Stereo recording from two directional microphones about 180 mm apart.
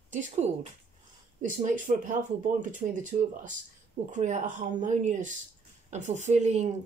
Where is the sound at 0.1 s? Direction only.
40° right (ahead or behind).